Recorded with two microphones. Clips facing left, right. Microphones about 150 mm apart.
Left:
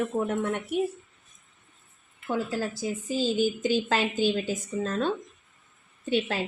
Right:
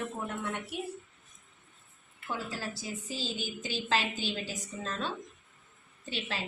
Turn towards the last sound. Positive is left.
turn(degrees=55)  # may be behind; listen again after turning